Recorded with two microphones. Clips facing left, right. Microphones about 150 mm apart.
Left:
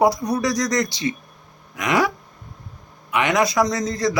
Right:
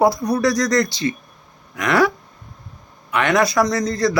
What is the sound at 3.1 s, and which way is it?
Speech, 15° left (ahead or behind).